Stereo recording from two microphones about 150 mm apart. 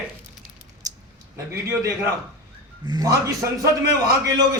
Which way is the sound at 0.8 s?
25° right (ahead or behind).